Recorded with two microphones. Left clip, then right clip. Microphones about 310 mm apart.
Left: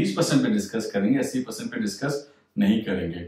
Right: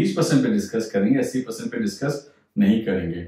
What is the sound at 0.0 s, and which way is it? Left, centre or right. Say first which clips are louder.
Speech: right 2 dB; centre.